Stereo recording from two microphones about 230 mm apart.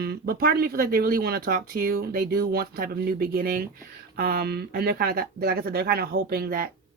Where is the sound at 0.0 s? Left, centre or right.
Right.